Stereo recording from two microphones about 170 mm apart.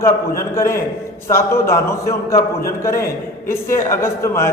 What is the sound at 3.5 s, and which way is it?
A man's voice, 15° left (ahead or behind).